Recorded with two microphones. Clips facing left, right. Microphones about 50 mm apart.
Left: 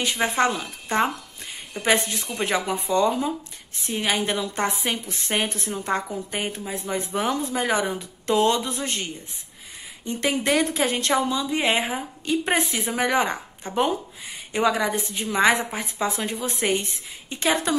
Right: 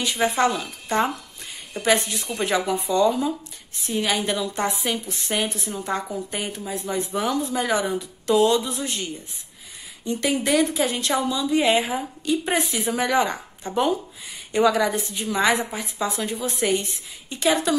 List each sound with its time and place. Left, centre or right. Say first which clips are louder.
0.0 s a woman's voice: right 1 dB; left